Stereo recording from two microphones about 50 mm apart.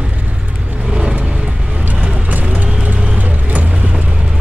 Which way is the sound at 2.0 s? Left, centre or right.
Right.